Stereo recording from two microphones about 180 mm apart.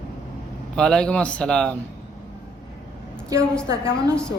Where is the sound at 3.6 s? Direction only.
15° right (ahead or behind).